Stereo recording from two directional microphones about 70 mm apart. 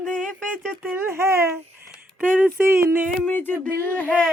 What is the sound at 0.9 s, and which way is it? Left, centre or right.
Speech, right.